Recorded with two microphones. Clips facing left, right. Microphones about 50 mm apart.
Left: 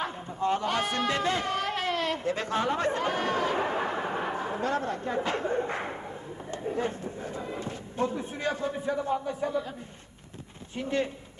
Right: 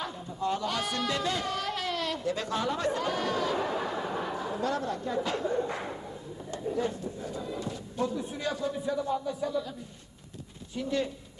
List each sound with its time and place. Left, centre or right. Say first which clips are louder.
0.0 s a sound: left 3 dB; left
6.5 s speech: even; left
10.8 s speech: left 1 dB; left